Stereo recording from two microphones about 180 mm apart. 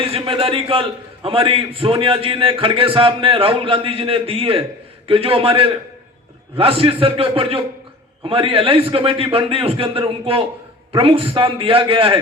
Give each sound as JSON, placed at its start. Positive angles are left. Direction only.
{"t": 0.0, "sound": "a man's voice", "side_deg": -30}